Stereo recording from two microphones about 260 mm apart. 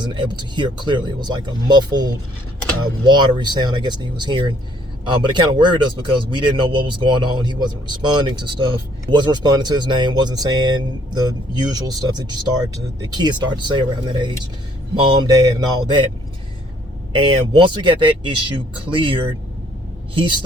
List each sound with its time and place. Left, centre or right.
0.0 s speech: centre
17.1 s speech: centre